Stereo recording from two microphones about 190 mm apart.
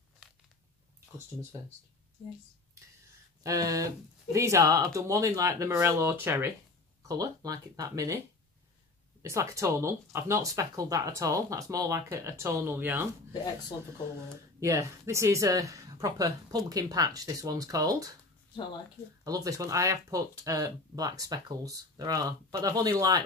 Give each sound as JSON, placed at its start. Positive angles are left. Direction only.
{"t": 0.2, "sound": "a sound", "side_deg": -5}
{"t": 3.4, "sound": "speech", "side_deg": -20}
{"t": 9.2, "sound": "speech", "side_deg": -15}
{"t": 14.6, "sound": "speech", "side_deg": -15}
{"t": 19.2, "sound": "speech", "side_deg": -20}